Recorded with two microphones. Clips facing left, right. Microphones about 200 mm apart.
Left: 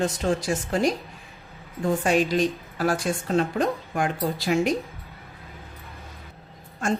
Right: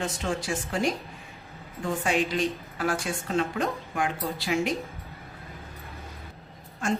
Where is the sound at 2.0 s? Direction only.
40° left (ahead or behind).